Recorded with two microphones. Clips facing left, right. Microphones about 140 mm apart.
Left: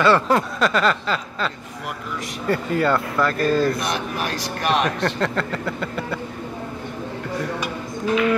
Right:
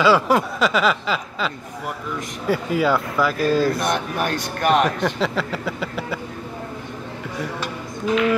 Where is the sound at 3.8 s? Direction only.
55° right (ahead or behind).